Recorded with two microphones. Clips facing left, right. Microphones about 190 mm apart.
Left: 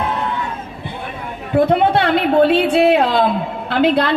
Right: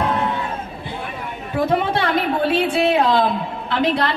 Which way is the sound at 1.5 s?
65° left (ahead or behind).